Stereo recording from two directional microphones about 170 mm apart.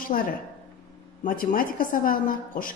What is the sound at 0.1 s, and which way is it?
A woman's voice, 55° left (ahead or behind).